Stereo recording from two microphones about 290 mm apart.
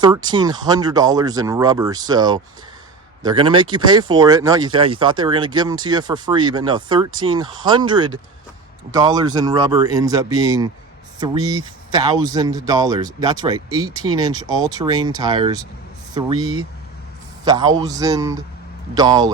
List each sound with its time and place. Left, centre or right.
0.0 s speech: centre
16.4 s speech: right
17.4 s speech: centre